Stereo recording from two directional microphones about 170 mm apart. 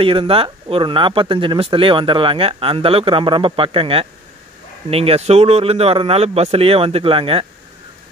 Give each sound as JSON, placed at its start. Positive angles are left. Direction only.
{"t": 0.0, "sound": "speech", "side_deg": -30}